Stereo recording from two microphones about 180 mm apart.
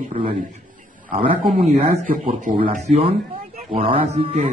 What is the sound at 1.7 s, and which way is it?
A man's voice, 35° right (ahead or behind).